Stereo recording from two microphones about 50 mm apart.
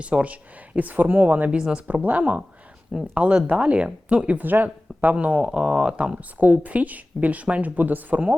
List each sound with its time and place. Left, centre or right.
0.0 s speech: right
1.5 s speech: centre
2.0 s speech: right
4.4 s speech: right
5.1 s speech: right
6.1 s speech: right